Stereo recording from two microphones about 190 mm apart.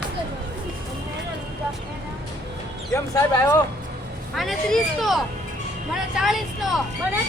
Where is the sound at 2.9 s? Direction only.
15° left (ahead or behind).